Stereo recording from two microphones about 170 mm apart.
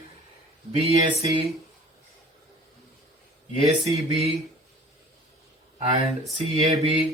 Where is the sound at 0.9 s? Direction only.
20° right (ahead or behind).